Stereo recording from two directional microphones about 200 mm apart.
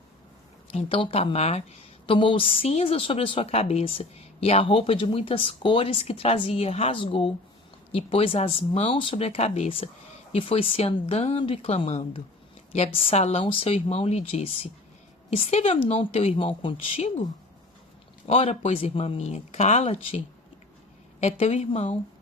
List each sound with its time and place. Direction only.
0.7 s a woman's voice: 30° left (ahead or behind)
18.3 s speech: 30° left (ahead or behind)